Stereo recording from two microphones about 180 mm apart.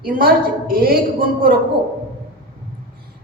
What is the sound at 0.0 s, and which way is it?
Speech, 55° right (ahead or behind).